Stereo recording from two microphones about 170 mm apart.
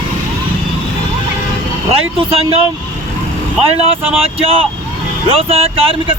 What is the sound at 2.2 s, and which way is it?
Speech, 30° right (ahead or behind).